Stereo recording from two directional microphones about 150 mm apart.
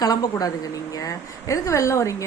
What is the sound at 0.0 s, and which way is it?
A woman's voice, 25° left (ahead or behind).